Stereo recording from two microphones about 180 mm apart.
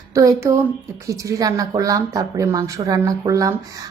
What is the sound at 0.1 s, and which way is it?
Speech, 20° right (ahead or behind).